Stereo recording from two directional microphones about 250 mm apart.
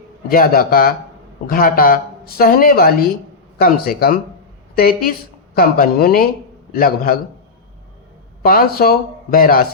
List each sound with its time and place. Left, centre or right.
0.3 s speech: left
8.4 s speech: left